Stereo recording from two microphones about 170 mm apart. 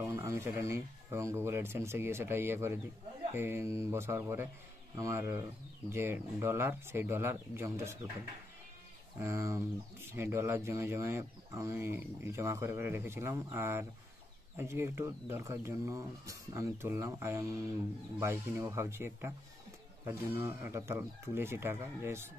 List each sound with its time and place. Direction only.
0.0 s speech: 15° right (ahead or behind)
9.2 s speech: 15° right (ahead or behind)